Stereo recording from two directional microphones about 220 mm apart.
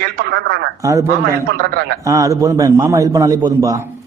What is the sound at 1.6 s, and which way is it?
Speech, 45° right (ahead or behind).